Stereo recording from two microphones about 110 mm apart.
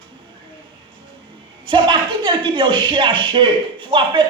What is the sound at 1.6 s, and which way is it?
Speech, 45° right (ahead or behind).